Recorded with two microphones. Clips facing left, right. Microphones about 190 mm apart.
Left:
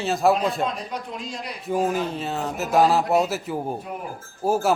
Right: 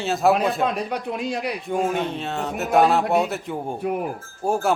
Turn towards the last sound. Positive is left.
turn(degrees=5)  # may be behind; listen again after turning